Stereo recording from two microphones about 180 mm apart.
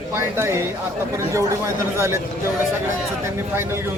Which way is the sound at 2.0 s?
15° right (ahead or behind).